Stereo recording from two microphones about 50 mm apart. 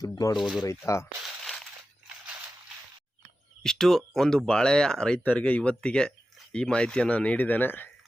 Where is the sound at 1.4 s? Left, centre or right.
Centre.